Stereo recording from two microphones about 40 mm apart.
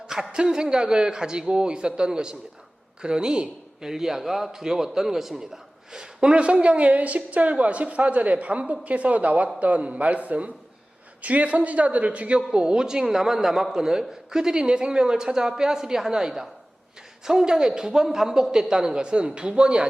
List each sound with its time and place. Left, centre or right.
0.1 s a man's voice: centre
12.5 s a man's voice: centre